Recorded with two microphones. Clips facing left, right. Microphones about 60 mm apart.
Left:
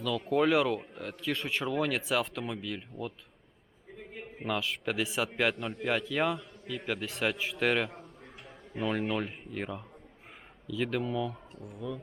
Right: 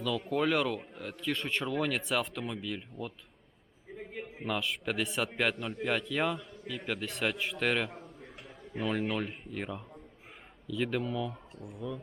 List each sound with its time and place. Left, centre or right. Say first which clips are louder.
0.0 s a man's voice: left 3 dB; centre
4.4 s a man's voice: left 1 dB; centre